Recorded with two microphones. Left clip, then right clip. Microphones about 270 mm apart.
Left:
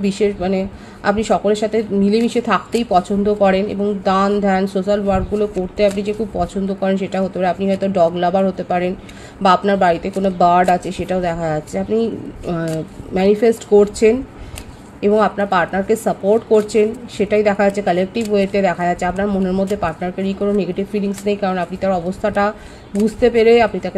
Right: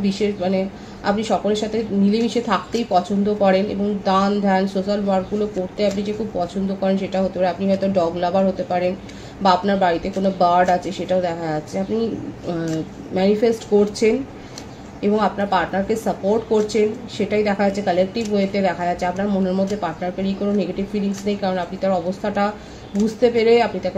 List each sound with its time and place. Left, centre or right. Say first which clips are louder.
0.0 s speech: left 4 dB; left